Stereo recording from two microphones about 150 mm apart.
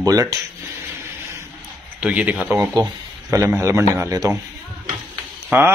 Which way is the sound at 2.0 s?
10° right (ahead or behind).